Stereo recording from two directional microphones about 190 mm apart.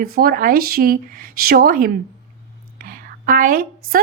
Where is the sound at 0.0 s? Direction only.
50° right (ahead or behind).